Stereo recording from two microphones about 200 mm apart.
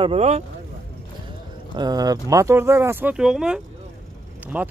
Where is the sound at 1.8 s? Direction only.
20° right (ahead or behind).